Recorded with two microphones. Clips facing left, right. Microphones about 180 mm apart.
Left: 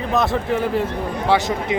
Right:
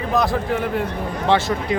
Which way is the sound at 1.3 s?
20° left (ahead or behind).